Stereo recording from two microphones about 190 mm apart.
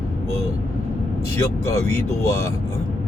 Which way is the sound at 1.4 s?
15° left (ahead or behind).